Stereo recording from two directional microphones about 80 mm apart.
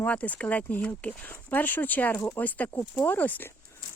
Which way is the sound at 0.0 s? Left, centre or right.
Centre.